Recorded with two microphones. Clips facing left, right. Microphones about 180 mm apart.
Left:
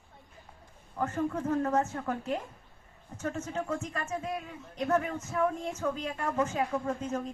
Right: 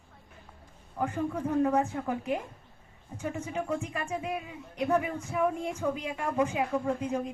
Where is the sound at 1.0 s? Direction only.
10° right (ahead or behind).